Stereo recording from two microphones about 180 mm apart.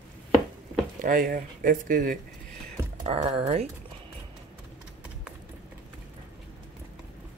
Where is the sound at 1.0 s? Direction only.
50° right (ahead or behind).